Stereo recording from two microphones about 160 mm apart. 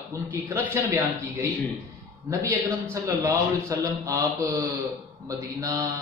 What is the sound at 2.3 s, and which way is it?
Speech, 20° right (ahead or behind).